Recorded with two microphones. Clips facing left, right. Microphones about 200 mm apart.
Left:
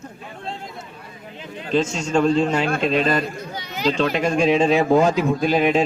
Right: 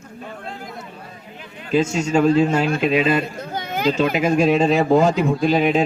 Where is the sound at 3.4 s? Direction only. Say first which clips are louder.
Right 2 dB; 55° right (ahead or behind).